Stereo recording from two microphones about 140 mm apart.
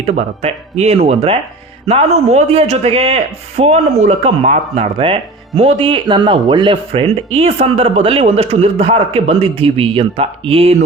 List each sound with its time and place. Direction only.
0.0 s a man's voice: 50° right (ahead or behind)